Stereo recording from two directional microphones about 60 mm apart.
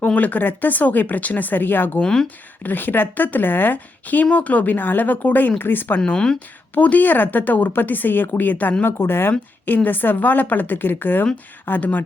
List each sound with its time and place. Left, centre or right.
0.0 s speech: left